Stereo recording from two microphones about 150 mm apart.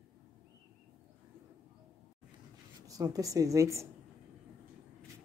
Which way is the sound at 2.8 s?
25° right (ahead or behind).